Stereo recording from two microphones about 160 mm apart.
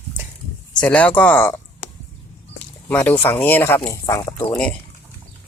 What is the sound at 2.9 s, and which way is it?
Speech, 10° left (ahead or behind).